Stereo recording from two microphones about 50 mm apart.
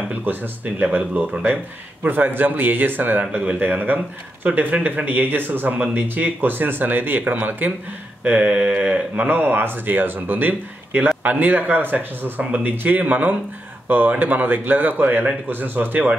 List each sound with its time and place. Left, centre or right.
0.2 s speech: right